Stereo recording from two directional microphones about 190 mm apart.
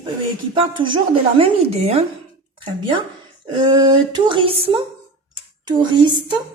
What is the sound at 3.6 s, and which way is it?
Speech, 25° right (ahead or behind).